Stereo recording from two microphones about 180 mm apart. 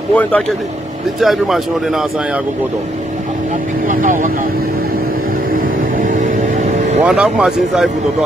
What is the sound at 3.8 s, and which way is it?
Speech, 45° right (ahead or behind).